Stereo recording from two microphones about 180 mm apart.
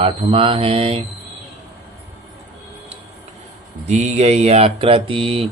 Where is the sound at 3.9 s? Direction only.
40° right (ahead or behind).